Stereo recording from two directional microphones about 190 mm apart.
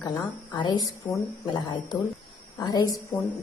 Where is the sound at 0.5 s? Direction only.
25° left (ahead or behind).